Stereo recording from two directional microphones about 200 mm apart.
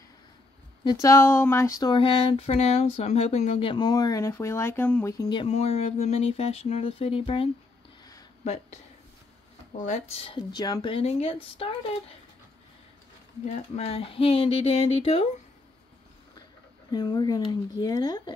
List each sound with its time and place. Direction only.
0.8 s speech: 15° left (ahead or behind)
8.0 s a sound: 20° left (ahead or behind)
9.8 s speech: 35° left (ahead or behind)
13.5 s speech: 30° left (ahead or behind)
16.9 s speech: 20° left (ahead or behind)